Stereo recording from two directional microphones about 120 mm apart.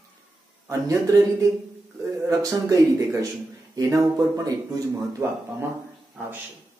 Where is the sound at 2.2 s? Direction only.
30° right (ahead or behind).